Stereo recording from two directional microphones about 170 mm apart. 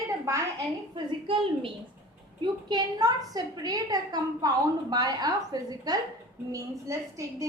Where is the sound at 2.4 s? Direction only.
25° right (ahead or behind).